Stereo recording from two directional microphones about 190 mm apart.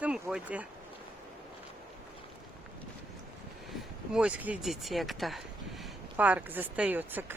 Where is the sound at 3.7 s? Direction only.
5° right (ahead or behind).